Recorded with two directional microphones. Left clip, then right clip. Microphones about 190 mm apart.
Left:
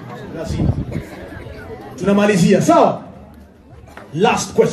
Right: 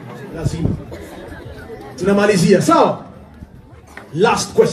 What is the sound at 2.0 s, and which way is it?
Speech, 50° right (ahead or behind).